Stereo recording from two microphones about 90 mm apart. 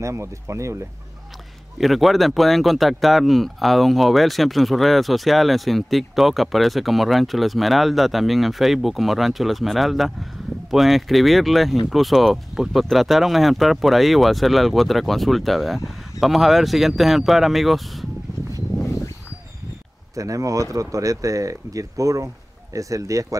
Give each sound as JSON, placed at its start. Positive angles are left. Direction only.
{"t": 0.0, "sound": "speech", "side_deg": -30}
{"t": 1.8, "sound": "speech", "side_deg": 0}
{"t": 20.2, "sound": "speech", "side_deg": -40}